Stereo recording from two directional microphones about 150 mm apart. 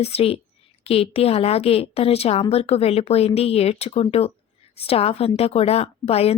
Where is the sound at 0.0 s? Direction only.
40° left (ahead or behind).